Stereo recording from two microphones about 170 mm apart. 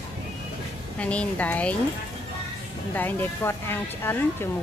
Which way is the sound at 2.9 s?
10° left (ahead or behind).